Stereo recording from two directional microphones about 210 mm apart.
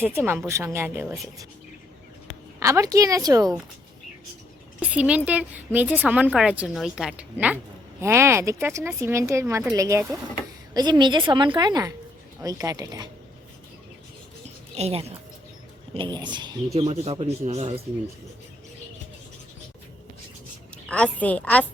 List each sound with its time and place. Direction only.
0.0 s a woman's voice: 10° right (ahead or behind)
2.6 s a woman's voice: 15° right (ahead or behind)
4.8 s a woman's voice: 5° right (ahead or behind)
14.4 s a sound: 30° right (ahead or behind)
16.0 s speech: 20° right (ahead or behind)
20.8 s a woman's voice: 5° left (ahead or behind)